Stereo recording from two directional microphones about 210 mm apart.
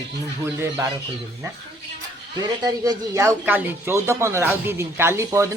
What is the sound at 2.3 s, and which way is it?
Speech, 15° right (ahead or behind).